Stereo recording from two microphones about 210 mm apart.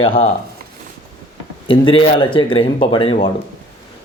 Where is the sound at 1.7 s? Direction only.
25° left (ahead or behind).